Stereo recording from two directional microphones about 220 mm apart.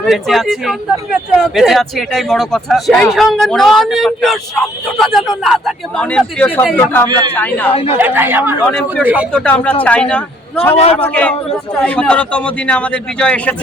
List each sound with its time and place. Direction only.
0.0 s speech: centre (ahead or behind)
7.7 s speech: 25° left (ahead or behind)
7.9 s speech: 10° right (ahead or behind)
9.3 s speech: 5° left (ahead or behind)